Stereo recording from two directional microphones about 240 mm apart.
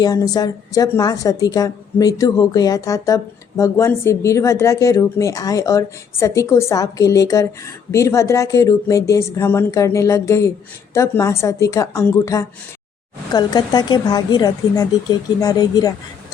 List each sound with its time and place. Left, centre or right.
0.0 s speech: centre